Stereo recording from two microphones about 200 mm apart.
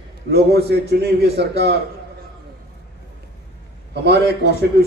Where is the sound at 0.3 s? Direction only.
55° right (ahead or behind).